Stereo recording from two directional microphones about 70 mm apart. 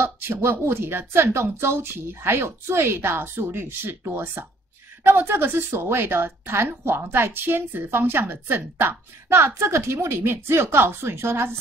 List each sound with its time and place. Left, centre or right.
0.0 s a woman's voice: right